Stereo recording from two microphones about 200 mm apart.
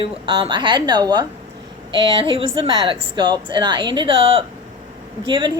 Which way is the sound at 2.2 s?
25° right (ahead or behind).